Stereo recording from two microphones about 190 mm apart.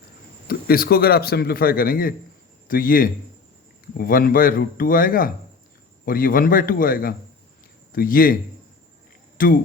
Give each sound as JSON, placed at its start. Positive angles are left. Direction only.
{"t": 0.4, "sound": "a man's voice", "side_deg": 50}
{"t": 9.4, "sound": "a man's voice", "side_deg": 45}